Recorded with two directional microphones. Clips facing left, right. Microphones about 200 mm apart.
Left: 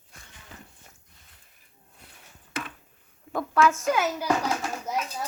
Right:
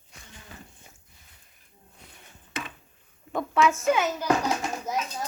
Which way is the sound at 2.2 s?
Centre (ahead or behind).